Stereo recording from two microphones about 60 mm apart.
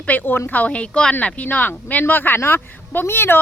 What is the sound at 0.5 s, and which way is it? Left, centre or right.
A woman's voice, left.